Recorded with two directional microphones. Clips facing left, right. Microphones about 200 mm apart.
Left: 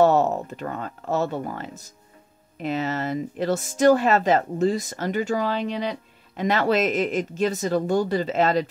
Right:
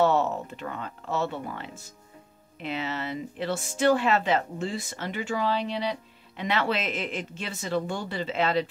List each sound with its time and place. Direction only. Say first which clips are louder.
0.0 s speech: left 5 dB; 40° left (ahead or behind)